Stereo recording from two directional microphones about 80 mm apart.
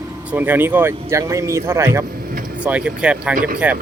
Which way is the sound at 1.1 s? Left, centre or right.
Right.